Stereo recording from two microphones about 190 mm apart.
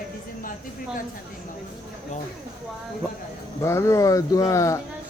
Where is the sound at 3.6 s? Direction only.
15° left (ahead or behind).